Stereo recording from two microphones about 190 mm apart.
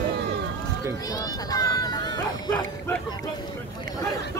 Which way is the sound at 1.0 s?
20° left (ahead or behind).